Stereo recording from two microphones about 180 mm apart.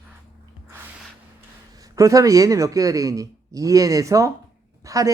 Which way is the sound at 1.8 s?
20° right (ahead or behind).